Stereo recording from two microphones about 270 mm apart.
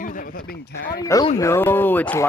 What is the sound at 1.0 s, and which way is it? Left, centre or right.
Speech, centre.